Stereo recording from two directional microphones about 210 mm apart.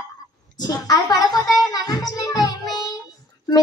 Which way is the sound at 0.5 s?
20° left (ahead or behind).